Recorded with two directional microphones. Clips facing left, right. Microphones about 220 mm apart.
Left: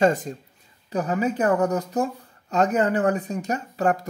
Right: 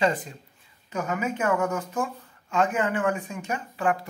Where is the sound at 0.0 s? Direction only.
45° left (ahead or behind).